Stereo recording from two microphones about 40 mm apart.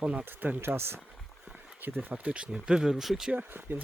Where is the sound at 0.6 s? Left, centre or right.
Right.